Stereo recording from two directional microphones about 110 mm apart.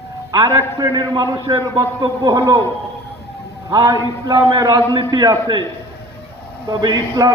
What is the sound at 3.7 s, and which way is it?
A man's voice, 35° right (ahead or behind).